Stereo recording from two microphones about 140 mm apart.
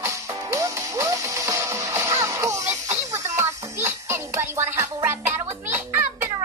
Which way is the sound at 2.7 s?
55° right (ahead or behind).